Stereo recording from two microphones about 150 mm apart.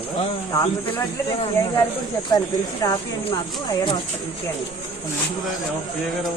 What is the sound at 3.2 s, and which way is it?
Speech, 30° left (ahead or behind).